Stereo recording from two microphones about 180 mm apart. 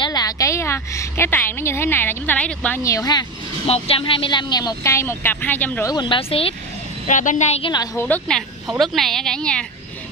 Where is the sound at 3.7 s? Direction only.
30° left (ahead or behind); by 5.9 s 10° left (ahead or behind).